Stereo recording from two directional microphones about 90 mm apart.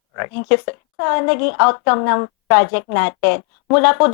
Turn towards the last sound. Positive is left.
turn(degrees=15)  # may be behind; listen again after turning